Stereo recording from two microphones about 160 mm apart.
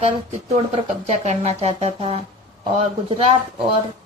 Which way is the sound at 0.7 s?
40° right (ahead or behind).